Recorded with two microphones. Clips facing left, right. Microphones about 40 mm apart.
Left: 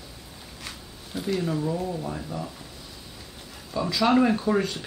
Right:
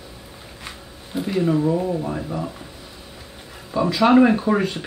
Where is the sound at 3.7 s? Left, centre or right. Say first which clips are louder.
Right 6 dB; right.